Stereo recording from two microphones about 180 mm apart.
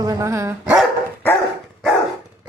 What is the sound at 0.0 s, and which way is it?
Speech, 20° right (ahead or behind).